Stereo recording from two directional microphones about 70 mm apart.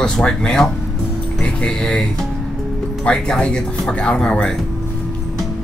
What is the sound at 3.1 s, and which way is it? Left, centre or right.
Speech, centre.